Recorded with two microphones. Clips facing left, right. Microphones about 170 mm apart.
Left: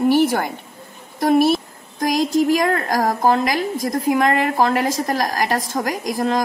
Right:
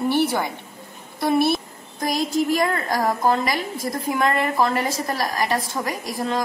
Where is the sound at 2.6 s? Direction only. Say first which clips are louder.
Left 3 dB; 45° left (ahead or behind).